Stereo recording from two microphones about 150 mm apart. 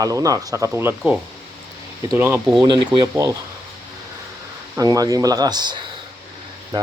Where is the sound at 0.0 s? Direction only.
20° right (ahead or behind).